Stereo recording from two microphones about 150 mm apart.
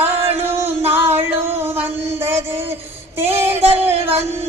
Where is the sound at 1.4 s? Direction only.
15° right (ahead or behind).